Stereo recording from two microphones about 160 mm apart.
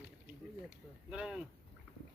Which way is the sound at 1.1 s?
5° right (ahead or behind).